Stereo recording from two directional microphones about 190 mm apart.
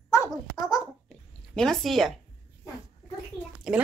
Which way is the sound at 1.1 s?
Centre (ahead or behind).